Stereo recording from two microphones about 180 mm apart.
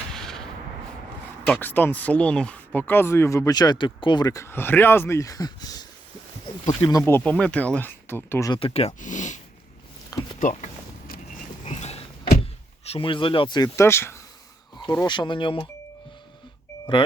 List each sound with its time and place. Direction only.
0.1 s a sound: 5° left (ahead or behind)
1.5 s speech: 10° left (ahead or behind)
8.5 s speech: 35° left (ahead or behind)
10.4 s speech: 40° left (ahead or behind)
11.6 s a sound: 40° left (ahead or behind)
12.8 s speech: 30° left (ahead or behind)